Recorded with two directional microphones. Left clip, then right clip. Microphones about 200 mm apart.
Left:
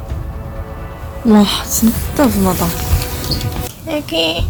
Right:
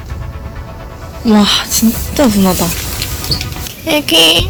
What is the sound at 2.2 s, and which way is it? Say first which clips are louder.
Speech: right 3 dB; 20° right (ahead or behind).